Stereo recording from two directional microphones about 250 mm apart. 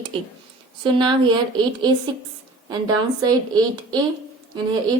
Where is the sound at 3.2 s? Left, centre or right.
Centre.